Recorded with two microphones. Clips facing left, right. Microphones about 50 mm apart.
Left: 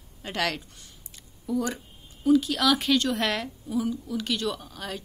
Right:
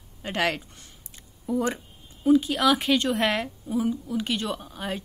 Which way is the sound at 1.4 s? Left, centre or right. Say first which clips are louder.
Right 2 dB; right.